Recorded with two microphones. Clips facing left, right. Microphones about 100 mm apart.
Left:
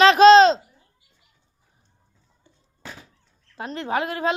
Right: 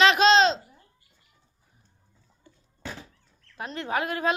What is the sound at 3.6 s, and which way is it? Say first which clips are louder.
Speech: left 3 dB; 30° left (ahead or behind).